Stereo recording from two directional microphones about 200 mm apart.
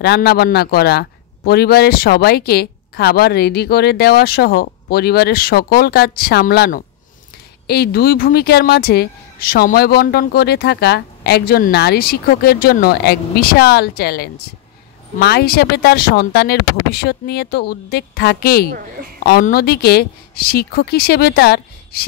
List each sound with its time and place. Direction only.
0.0 s a man's voice: 55° left (ahead or behind)